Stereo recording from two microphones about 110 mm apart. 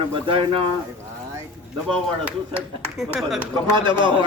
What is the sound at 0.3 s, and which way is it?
Speech, 55° right (ahead or behind).